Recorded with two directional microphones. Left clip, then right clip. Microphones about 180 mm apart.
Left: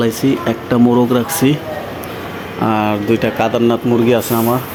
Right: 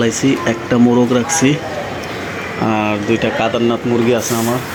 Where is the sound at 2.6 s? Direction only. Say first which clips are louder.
Left 2 dB; 20° left (ahead or behind).